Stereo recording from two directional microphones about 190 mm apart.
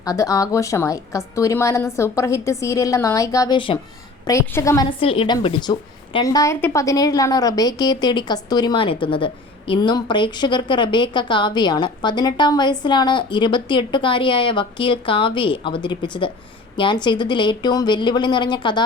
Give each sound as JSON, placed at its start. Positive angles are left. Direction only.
{"t": 0.0, "sound": "a woman's voice", "side_deg": 20}
{"t": 4.9, "sound": "a woman's voice", "side_deg": 30}